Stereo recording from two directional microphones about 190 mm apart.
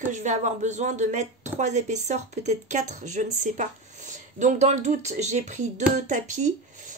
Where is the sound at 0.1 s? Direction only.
40° right (ahead or behind).